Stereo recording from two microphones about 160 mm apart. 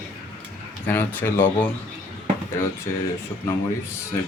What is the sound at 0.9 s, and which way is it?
Speech, 15° left (ahead or behind).